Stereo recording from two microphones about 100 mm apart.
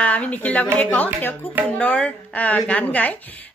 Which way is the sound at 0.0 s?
15° left (ahead or behind).